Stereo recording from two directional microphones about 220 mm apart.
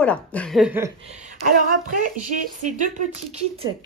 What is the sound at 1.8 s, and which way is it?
Speech, 35° right (ahead or behind).